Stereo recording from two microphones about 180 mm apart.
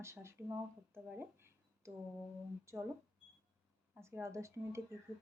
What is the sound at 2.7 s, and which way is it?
Speech, 15° right (ahead or behind).